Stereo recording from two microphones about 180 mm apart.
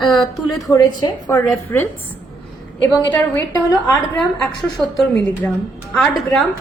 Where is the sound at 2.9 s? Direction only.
10° left (ahead or behind).